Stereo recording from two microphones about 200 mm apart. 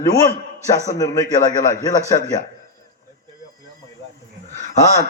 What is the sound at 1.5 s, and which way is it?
Speech, 40° left (ahead or behind).